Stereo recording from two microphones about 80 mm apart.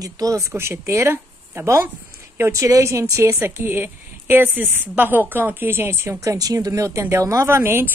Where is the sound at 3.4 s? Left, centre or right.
Right.